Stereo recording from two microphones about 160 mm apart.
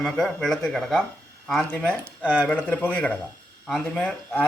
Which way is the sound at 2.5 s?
10° left (ahead or behind).